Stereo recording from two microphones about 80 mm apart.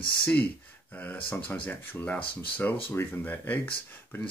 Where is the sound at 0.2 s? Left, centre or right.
Centre.